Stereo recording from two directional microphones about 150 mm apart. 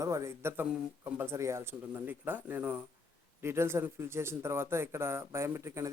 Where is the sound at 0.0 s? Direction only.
20° right (ahead or behind).